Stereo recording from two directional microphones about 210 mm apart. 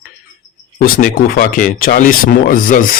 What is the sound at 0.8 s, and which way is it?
A man's voice, 45° left (ahead or behind).